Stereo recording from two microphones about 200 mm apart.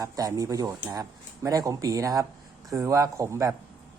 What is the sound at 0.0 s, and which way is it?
Speech, 15° right (ahead or behind).